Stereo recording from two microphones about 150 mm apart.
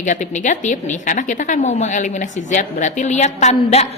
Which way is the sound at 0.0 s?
55° left (ahead or behind).